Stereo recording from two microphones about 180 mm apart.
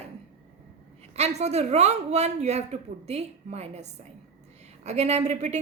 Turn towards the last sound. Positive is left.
turn(degrees=-40)  # may be behind; listen again after turning